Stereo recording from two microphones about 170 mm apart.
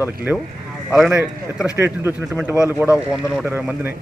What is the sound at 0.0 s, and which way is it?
Speech, 10° right (ahead or behind).